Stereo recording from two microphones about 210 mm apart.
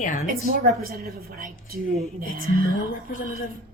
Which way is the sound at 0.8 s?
45° right (ahead or behind).